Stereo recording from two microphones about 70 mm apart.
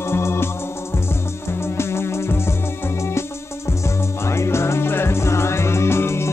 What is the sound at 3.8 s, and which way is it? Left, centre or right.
Music, left.